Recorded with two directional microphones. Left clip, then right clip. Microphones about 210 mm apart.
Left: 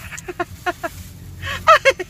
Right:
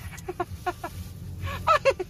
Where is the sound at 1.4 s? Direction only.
35° left (ahead or behind).